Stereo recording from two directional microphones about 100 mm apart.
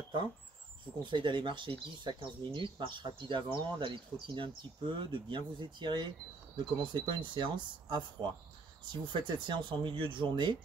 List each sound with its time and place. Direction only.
1.1 s speech: 50° right (ahead or behind)